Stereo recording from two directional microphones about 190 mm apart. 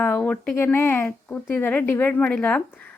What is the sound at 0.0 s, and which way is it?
Speech, 10° left (ahead or behind).